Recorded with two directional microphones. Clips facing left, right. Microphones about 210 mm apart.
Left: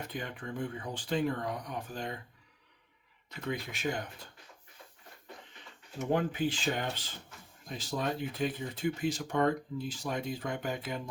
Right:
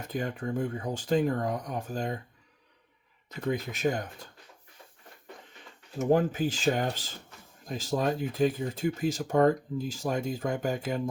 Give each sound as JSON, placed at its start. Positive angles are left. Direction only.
{"t": 0.1, "sound": "speech", "side_deg": -40}
{"t": 3.4, "sound": "speech", "side_deg": -40}
{"t": 6.0, "sound": "speech", "side_deg": -40}